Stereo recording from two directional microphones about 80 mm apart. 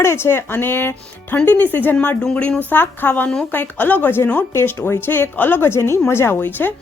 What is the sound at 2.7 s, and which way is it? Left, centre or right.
Speech, left.